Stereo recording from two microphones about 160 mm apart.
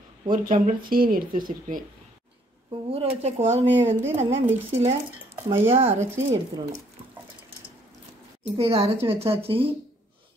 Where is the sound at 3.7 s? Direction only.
15° right (ahead or behind).